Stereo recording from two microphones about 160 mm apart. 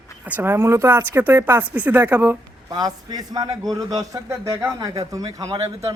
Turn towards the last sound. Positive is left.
turn(degrees=-25)  # may be behind; listen again after turning